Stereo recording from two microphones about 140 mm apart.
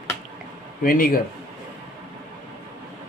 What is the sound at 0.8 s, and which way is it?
Speech, 90° left.